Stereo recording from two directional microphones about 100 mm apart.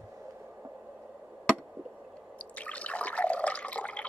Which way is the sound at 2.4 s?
15° left (ahead or behind).